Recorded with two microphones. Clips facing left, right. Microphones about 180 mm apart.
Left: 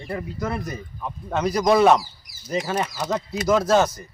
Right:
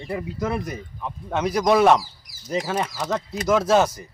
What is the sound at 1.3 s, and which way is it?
A man's voice, 5° right (ahead or behind).